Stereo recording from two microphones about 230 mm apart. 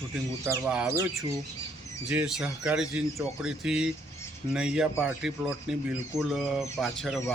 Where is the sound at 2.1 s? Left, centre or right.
Centre.